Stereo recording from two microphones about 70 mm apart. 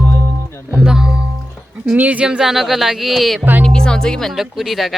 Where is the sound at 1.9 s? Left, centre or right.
Right; by 3.4 s centre.